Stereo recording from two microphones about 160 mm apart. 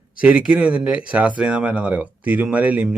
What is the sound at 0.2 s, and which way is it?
Speech, 5° right (ahead or behind).